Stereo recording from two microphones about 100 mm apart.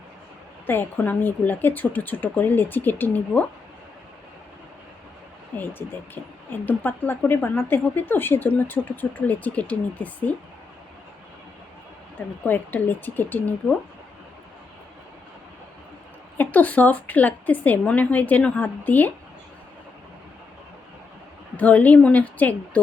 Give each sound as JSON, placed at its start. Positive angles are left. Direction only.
{"t": 0.7, "sound": "a woman's voice", "side_deg": 20}
{"t": 5.5, "sound": "a woman's voice", "side_deg": 20}
{"t": 12.5, "sound": "a woman's voice", "side_deg": 20}
{"t": 16.4, "sound": "a woman's voice", "side_deg": 15}
{"t": 21.5, "sound": "a woman's voice", "side_deg": 15}